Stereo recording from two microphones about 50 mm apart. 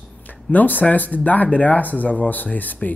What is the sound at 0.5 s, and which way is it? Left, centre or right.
A man's voice, left.